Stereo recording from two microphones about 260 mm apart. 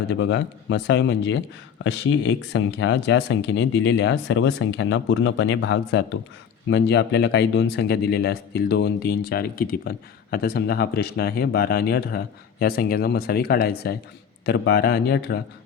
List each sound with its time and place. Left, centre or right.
0.2 s speech: left